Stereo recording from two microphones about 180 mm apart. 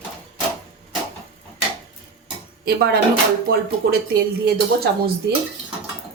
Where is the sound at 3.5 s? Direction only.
60° right (ahead or behind).